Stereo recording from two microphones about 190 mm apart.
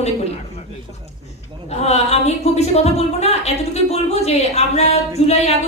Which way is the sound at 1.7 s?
35° left (ahead or behind).